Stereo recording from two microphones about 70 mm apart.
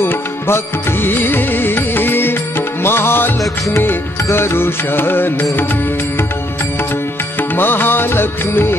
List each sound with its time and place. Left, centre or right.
0.0 s music: left
7.3 s music: left